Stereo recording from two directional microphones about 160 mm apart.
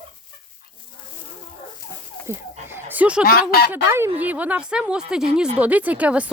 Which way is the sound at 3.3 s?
70° left (ahead or behind).